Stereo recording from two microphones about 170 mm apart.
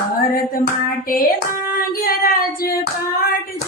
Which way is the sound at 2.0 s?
60° left (ahead or behind).